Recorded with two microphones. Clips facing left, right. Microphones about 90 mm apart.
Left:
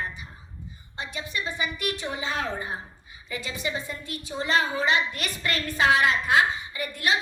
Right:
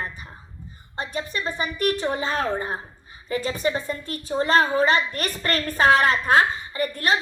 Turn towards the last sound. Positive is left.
turn(degrees=-40)  # may be behind; listen again after turning